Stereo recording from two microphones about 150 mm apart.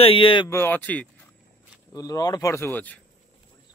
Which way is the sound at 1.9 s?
25° left (ahead or behind).